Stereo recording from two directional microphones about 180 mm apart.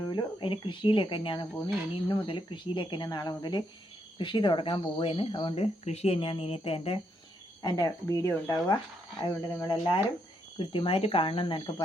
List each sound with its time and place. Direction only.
0.0 s speech: 25° left (ahead or behind)